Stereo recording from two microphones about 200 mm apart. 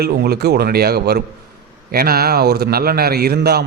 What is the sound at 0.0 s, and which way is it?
A man's voice, 50° right (ahead or behind).